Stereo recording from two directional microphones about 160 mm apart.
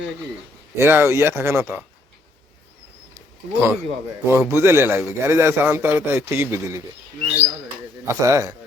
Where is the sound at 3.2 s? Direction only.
15° right (ahead or behind).